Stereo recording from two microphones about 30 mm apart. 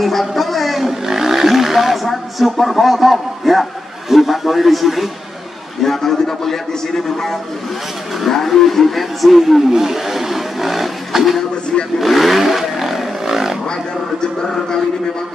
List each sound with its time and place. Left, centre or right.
0.0 s a sound: centre
1.0 s roaring cats: centre
2.0 s a man's voice: centre
5.9 s a man's voice: centre
9.7 s speech: centre
12.0 s vehicle: centre
14.4 s a man's voice: centre